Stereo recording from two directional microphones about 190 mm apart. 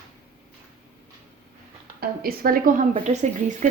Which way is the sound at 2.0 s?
50° right (ahead or behind).